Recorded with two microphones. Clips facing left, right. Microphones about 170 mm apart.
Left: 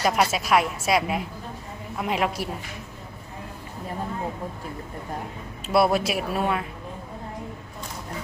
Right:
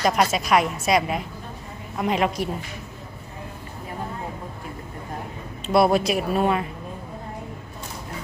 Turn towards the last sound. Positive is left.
turn(degrees=0)  # may be behind; listen again after turning